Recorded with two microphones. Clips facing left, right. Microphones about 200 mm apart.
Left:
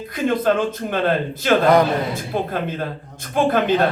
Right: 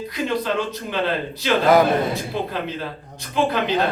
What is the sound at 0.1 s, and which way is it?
A man's voice, 50° left (ahead or behind).